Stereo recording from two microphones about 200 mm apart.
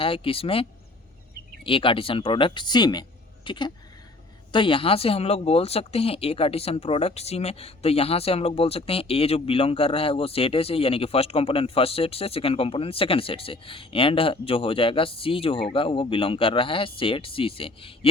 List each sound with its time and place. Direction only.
0.0 s speech: 25° left (ahead or behind)